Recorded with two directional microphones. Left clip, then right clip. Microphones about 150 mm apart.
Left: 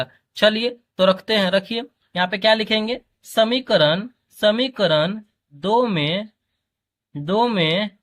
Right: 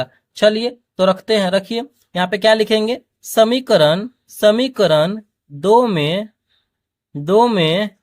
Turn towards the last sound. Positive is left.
turn(degrees=-40)  # may be behind; listen again after turning